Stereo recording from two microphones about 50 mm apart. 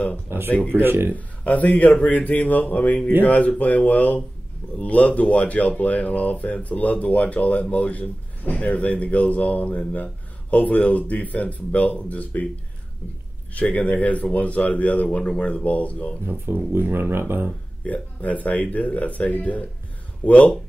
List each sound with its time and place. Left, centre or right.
0.3 s speech: right
1.1 s speech: left
13.6 s speech: left
16.3 s speech: right
17.8 s speech: left